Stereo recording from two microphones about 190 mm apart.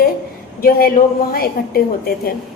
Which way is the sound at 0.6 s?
50° left (ahead or behind).